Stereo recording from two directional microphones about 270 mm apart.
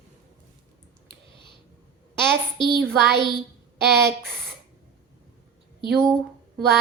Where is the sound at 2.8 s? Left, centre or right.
Right.